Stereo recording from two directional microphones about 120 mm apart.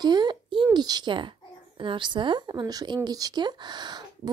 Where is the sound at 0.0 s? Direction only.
35° right (ahead or behind).